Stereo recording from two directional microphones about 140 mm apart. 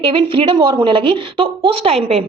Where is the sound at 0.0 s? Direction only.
40° right (ahead or behind).